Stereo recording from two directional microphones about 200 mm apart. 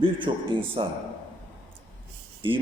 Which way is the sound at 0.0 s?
25° right (ahead or behind).